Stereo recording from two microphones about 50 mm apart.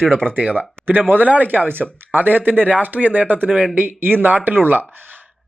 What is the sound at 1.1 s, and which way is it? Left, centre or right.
Speech, right.